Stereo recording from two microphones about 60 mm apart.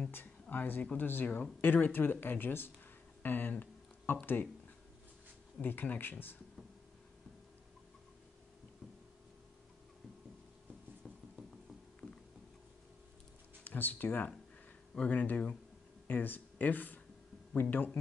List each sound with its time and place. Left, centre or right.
0.1 s speech: left
5.6 s speech: left
13.7 s speech: left